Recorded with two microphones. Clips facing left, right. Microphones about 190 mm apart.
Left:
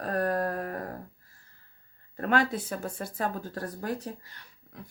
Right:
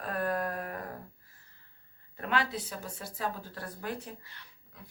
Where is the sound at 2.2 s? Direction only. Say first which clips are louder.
Left 5 dB; 45° left (ahead or behind).